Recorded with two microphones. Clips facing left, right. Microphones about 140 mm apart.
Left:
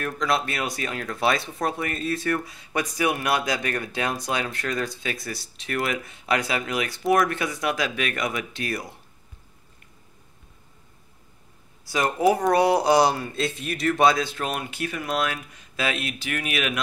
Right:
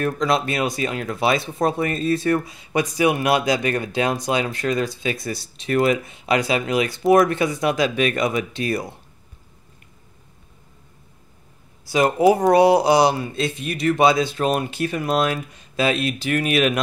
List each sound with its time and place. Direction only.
0.0 s speech: 25° right (ahead or behind)
11.8 s speech: 20° right (ahead or behind)
12.7 s speech: 5° right (ahead or behind)
14.3 s speech: 30° right (ahead or behind)